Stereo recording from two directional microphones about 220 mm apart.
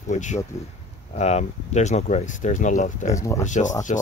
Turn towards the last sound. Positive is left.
turn(degrees=35)  # may be behind; listen again after turning